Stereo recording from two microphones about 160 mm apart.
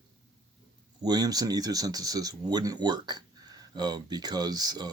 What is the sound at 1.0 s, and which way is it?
Speech, 25° right (ahead or behind).